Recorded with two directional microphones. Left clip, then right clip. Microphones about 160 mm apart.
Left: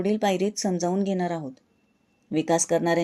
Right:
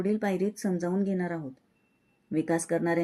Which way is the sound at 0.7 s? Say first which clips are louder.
Left 5 dB; 25° left (ahead or behind).